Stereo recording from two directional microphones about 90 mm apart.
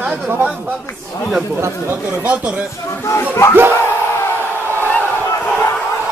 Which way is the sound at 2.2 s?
10° right (ahead or behind).